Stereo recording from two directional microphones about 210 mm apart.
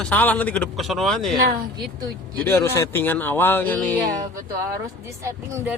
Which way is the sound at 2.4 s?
10° left (ahead or behind).